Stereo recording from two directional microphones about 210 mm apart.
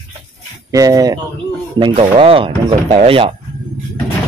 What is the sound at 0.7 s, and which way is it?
Speech, 15° right (ahead or behind).